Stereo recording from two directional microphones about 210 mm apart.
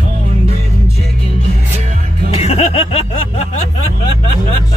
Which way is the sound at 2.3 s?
30° left (ahead or behind).